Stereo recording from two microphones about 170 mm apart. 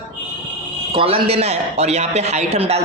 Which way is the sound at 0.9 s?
35° right (ahead or behind).